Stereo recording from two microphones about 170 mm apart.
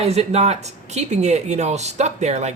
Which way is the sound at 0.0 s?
40° right (ahead or behind).